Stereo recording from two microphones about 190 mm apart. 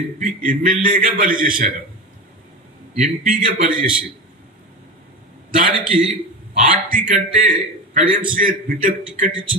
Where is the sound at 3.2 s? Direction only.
45° right (ahead or behind).